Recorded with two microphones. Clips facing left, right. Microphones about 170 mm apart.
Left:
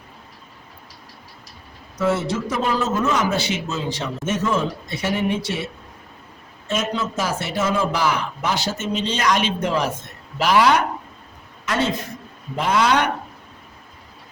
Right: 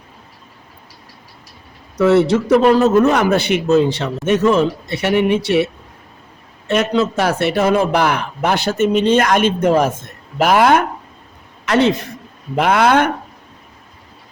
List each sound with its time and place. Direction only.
2.0 s a man's voice: 70° right (ahead or behind)
6.7 s speech: 65° right (ahead or behind)
11.6 s a man's voice: 70° right (ahead or behind); by 13.1 s 55° right (ahead or behind)